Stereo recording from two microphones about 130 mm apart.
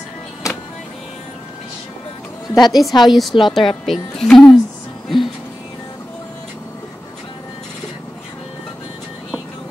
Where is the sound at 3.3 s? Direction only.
40° left (ahead or behind).